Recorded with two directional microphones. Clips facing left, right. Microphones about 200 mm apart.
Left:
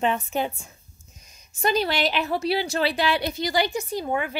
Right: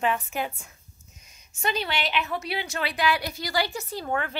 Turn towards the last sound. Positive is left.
turn(degrees=15)  # may be behind; listen again after turning